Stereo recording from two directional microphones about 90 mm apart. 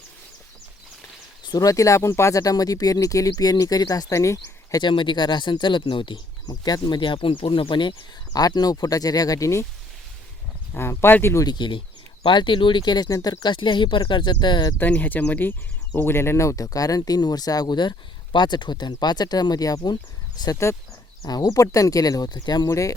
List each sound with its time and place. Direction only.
1.5 s speech: 45° left (ahead or behind)
4.8 s speech: 60° left (ahead or behind)
6.5 s speech: 45° left (ahead or behind)
8.3 s speech: 45° left (ahead or behind)
10.8 s speech: 25° left (ahead or behind)
11.4 s speech: 55° left (ahead or behind)
13.1 s speech: 35° left (ahead or behind)
13.4 s speech: 60° left (ahead or behind)
14.8 s speech: 20° left (ahead or behind); by 22.7 s 50° left (ahead or behind)
22.7 s speech: 35° left (ahead or behind)